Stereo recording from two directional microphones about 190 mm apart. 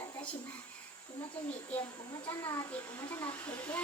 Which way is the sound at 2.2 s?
15° left (ahead or behind).